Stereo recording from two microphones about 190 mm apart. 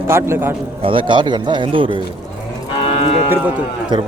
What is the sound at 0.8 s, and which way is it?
Speech, 25° right (ahead or behind).